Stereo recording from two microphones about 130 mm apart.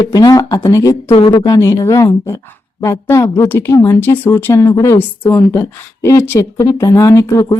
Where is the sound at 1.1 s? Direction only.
40° left (ahead or behind).